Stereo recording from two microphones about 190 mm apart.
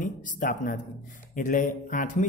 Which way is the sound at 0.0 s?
45° left (ahead or behind).